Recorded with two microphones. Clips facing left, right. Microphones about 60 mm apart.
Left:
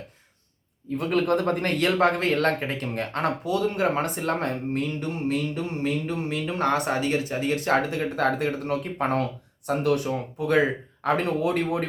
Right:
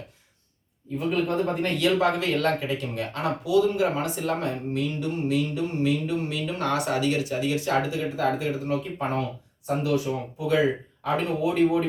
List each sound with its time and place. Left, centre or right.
0.9 s speech: left